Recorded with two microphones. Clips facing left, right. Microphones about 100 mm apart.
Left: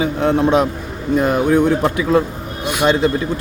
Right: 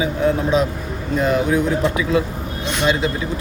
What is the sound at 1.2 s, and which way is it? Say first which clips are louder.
Speech: left 3 dB; 55° left (ahead or behind).